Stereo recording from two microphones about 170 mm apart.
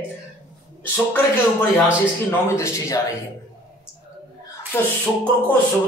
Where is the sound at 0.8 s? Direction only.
10° left (ahead or behind).